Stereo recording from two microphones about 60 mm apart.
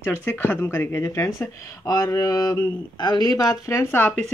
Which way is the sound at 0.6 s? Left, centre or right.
Left.